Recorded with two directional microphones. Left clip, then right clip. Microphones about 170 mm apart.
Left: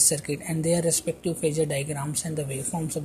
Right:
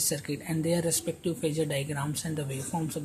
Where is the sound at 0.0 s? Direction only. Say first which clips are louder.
Left 5 dB; 20° left (ahead or behind).